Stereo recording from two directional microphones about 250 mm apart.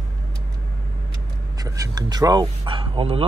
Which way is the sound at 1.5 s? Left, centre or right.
Centre.